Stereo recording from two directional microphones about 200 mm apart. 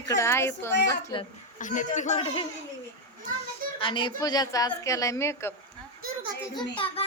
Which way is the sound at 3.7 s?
25° left (ahead or behind).